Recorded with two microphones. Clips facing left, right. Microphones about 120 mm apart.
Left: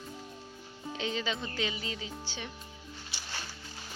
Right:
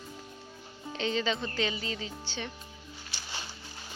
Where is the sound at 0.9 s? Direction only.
5° left (ahead or behind).